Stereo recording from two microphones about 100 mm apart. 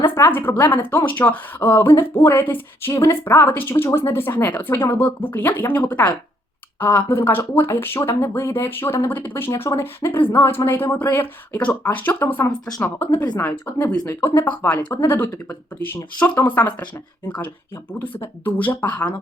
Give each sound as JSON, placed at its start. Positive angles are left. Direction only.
{"t": 0.1, "sound": "a woman's voice", "side_deg": 20}